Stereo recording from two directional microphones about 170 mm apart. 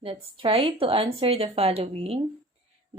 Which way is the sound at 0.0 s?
30° right (ahead or behind).